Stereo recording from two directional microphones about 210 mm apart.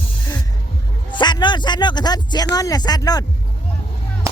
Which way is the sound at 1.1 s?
20° left (ahead or behind).